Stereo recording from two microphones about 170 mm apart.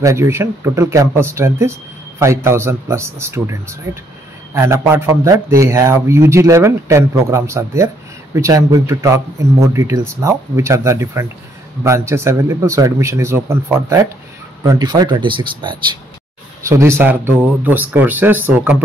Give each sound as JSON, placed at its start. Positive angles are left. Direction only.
{"t": 0.0, "sound": "speech", "side_deg": -15}
{"t": 16.6, "sound": "speech", "side_deg": -15}